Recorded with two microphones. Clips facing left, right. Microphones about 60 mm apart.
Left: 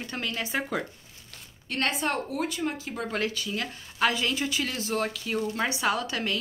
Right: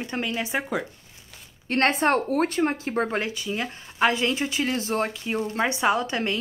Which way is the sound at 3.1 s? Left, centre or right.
Right.